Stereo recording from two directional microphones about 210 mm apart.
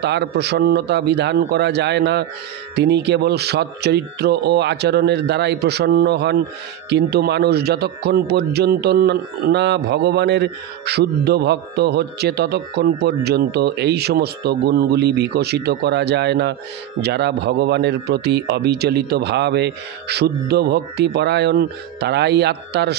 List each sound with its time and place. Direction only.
0.0 s a man's voice: 55° right (ahead or behind)